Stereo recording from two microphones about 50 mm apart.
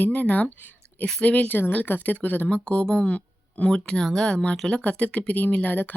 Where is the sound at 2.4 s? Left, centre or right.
Left.